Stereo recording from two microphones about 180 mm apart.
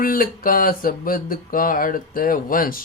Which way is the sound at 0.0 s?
50° left (ahead or behind).